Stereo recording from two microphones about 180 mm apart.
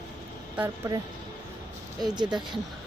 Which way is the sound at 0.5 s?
15° right (ahead or behind).